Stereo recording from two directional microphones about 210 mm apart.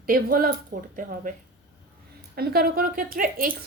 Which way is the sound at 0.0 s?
45° right (ahead or behind).